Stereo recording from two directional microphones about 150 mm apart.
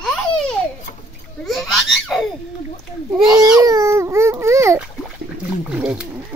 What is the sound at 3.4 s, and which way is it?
Speech, 25° right (ahead or behind).